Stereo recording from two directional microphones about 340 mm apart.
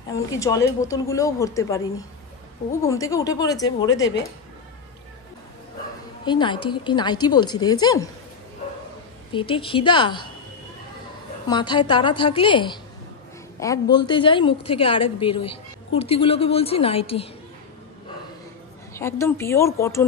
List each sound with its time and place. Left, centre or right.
0.3 s a woman's voice: centre
3.9 s speech: left
6.2 s a woman's voice: centre
9.3 s a woman's voice: centre
11.4 s a woman's voice: centre
18.9 s a woman's voice: centre